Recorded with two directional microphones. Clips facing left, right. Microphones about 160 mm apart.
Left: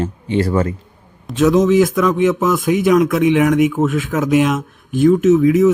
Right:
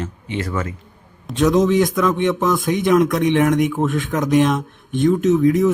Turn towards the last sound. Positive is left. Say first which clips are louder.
# left 4 dB
turn(degrees=5)  # may be behind; listen again after turning